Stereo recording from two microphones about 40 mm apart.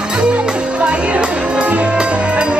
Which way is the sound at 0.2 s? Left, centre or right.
Right.